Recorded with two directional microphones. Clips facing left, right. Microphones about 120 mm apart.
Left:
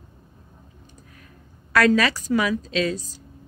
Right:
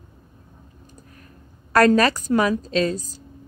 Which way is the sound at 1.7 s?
45° right (ahead or behind).